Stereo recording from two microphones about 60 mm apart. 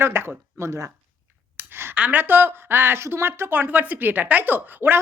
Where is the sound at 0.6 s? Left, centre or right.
Right.